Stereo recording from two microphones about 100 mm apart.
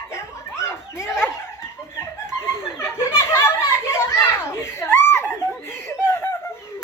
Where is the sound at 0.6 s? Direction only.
25° left (ahead or behind).